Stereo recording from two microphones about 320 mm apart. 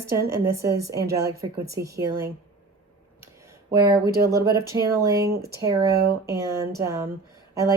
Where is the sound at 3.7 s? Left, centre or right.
Centre.